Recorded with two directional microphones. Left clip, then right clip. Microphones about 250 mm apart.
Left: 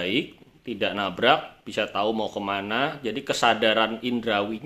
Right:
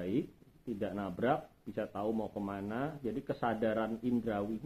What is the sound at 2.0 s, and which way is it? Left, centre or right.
Speech, left.